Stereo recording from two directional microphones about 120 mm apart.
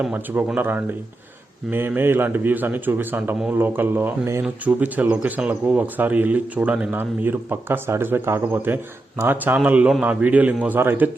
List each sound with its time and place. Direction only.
0.0 s speech: 15° right (ahead or behind)